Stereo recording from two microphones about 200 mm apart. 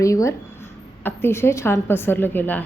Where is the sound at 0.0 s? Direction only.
15° left (ahead or behind).